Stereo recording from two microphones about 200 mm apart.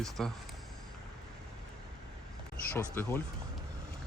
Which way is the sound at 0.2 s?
5° left (ahead or behind).